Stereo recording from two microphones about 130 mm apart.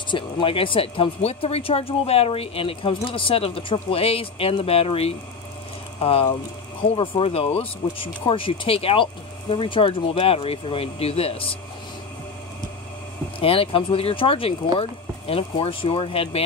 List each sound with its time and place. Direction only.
0.1 s speech: 45° left (ahead or behind)
13.4 s speech: 45° left (ahead or behind)